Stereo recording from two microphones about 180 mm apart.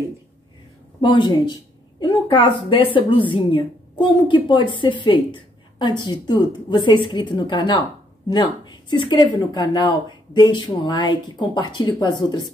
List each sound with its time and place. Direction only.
1.0 s a woman's voice: 25° left (ahead or behind)
8.9 s a woman's voice: 25° left (ahead or behind)